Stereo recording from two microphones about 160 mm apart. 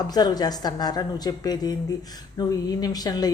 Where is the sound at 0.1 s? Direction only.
25° left (ahead or behind).